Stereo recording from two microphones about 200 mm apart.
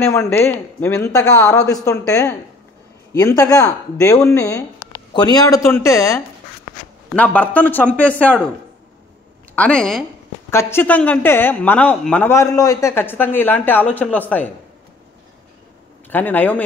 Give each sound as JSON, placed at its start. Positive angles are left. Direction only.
{"t": 0.0, "sound": "speech", "side_deg": 15}
{"t": 9.6, "sound": "speech", "side_deg": 5}
{"t": 16.1, "sound": "speech", "side_deg": 10}